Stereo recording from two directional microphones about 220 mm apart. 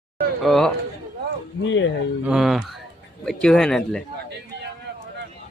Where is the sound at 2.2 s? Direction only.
Centre (ahead or behind).